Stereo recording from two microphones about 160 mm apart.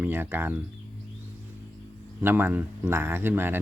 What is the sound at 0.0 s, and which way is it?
Speech, 15° right (ahead or behind).